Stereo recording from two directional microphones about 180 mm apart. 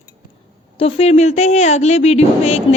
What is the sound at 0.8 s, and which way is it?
A woman's voice, 30° left (ahead or behind).